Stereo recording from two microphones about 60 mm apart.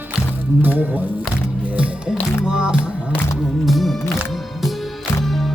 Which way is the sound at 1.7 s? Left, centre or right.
Centre.